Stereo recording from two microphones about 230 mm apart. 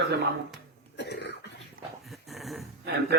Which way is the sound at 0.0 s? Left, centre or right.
Right.